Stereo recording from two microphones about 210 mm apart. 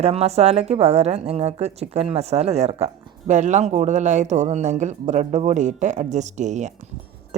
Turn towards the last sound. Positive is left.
turn(degrees=-35)  # may be behind; listen again after turning